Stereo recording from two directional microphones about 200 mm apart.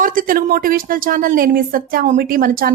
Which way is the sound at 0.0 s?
45° right (ahead or behind).